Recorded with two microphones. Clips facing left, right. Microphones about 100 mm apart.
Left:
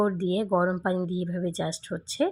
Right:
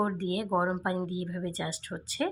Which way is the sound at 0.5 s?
15° left (ahead or behind).